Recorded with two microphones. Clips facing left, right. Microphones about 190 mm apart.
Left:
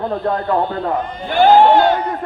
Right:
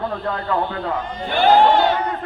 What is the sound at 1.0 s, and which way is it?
Speech, 50° left (ahead or behind).